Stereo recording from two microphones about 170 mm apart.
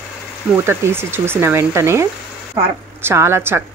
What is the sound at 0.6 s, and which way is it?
Speech, 15° right (ahead or behind).